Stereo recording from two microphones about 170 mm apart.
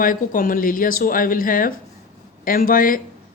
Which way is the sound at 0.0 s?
55° left (ahead or behind).